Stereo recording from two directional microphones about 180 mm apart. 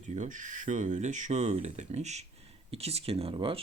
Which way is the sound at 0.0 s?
40° right (ahead or behind).